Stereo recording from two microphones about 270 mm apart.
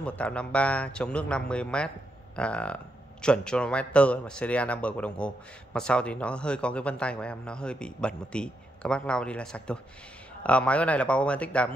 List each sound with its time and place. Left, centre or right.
0.0 s a man's voice: centre